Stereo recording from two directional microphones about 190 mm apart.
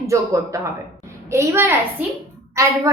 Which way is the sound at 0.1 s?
15° right (ahead or behind).